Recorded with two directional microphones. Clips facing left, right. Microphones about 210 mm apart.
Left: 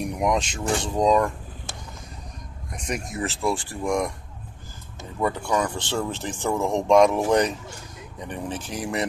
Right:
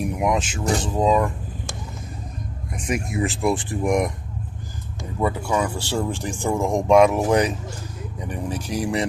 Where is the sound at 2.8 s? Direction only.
10° right (ahead or behind).